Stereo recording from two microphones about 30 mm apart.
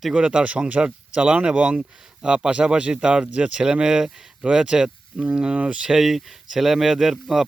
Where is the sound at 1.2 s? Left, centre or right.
Right.